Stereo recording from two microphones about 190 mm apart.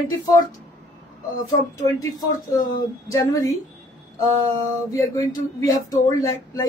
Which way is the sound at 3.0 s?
15° left (ahead or behind).